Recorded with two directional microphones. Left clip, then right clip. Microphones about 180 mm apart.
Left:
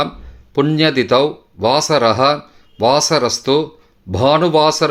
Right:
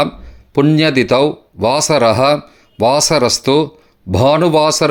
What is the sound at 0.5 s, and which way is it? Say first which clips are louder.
Speech: right 2 dB; 25° right (ahead or behind).